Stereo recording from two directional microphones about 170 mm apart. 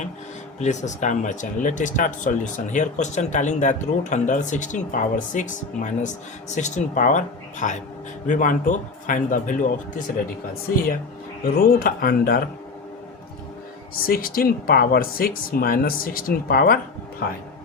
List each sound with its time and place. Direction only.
0.6 s speech: 45° left (ahead or behind)
11.4 s speech: 60° left (ahead or behind)
13.9 s speech: 60° left (ahead or behind)